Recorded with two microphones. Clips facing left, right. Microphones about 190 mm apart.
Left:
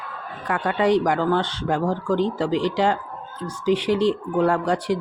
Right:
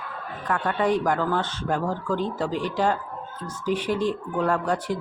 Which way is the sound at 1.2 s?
30° left (ahead or behind).